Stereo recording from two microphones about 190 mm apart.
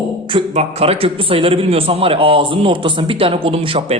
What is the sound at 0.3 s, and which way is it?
A man's voice, 30° right (ahead or behind).